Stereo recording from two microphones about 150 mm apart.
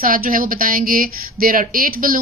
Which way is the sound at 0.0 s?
70° right (ahead or behind).